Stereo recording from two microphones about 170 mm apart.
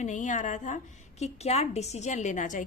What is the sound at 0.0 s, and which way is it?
A woman's voice, 45° left (ahead or behind).